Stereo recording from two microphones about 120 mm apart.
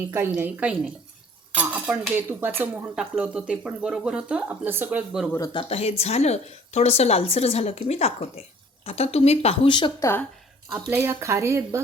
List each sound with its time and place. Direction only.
0.0 s speech: 20° right (ahead or behind)
2.9 s speech: 5° right (ahead or behind)
5.5 s a woman's voice: 55° left (ahead or behind)
10.0 s a woman's voice: 20° left (ahead or behind)
10.9 s speech: 25° right (ahead or behind)